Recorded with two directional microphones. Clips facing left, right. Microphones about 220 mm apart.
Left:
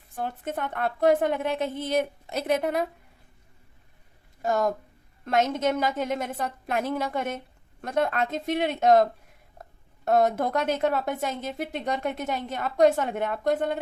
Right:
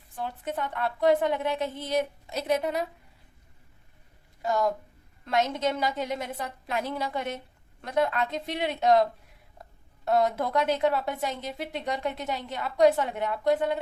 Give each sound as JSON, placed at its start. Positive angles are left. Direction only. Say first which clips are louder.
{"t": 0.2, "sound": "a woman's voice", "louder": "left 1 dB", "side_deg": 50}
{"t": 4.4, "sound": "a woman's voice", "louder": "left 1 dB", "side_deg": 50}
{"t": 10.1, "sound": "a woman's voice", "louder": "left 2 dB", "side_deg": 50}